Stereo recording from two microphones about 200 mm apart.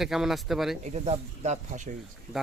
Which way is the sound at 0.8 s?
35° right (ahead or behind).